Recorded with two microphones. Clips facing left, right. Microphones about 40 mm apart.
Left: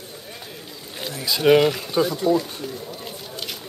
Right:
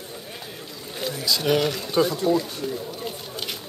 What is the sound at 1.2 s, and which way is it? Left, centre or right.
Speech, left.